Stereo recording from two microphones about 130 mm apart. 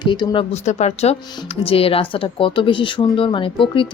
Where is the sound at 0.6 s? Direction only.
55° left (ahead or behind).